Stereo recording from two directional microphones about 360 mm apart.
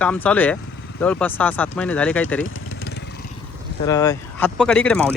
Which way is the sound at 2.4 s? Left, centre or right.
Left.